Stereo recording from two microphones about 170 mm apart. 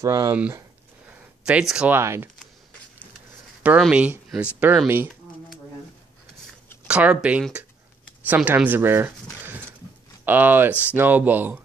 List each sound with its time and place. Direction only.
0.0 s speech: 20° right (ahead or behind)
1.0 s speech: 5° right (ahead or behind)
3.6 s speech: 5° right (ahead or behind)
6.9 s speech: 5° right (ahead or behind)